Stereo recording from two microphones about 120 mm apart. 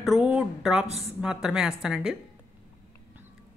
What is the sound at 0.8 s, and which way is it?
Speech, 60° right (ahead or behind).